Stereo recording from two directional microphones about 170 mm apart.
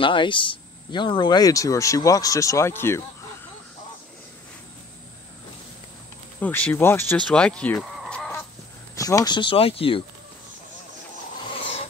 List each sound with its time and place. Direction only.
0.0 s speech: 30° left (ahead or behind)
6.4 s speech: 10° left (ahead or behind)
8.9 s speech: 20° left (ahead or behind)